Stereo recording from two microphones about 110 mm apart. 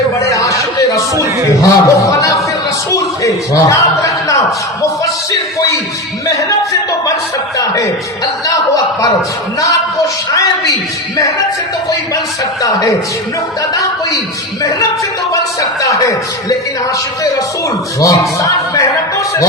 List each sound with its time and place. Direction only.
0.2 s a sound: 30° left (ahead or behind)
2.9 s a man's voice: 30° left (ahead or behind)
8.4 s a man's voice: 30° left (ahead or behind)
14.6 s a man's voice: 30° left (ahead or behind)
18.0 s a man's voice: 30° left (ahead or behind)